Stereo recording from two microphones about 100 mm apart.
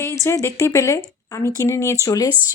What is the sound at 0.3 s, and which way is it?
A woman's voice, 30° left (ahead or behind).